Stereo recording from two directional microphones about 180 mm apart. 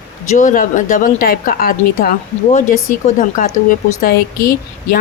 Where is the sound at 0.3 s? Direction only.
45° left (ahead or behind).